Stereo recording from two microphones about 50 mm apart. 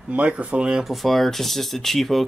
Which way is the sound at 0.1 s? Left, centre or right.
Right.